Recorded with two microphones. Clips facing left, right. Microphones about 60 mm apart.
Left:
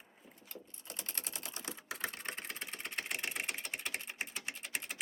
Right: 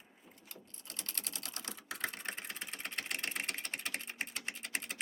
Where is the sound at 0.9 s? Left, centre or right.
Left.